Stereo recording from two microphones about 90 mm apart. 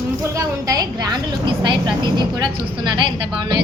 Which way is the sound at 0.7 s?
50° right (ahead or behind).